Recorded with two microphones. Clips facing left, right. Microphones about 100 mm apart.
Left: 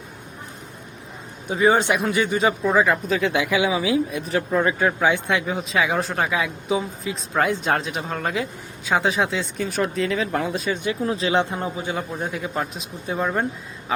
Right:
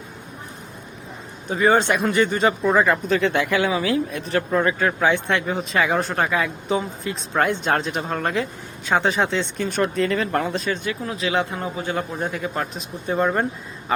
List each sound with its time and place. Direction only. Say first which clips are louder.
1.5 s speech: even; 10° left (ahead or behind)
10.8 s a man's voice: left 3 dB; 30° left (ahead or behind)
11.9 s speech: right 2 dB; 5° left (ahead or behind)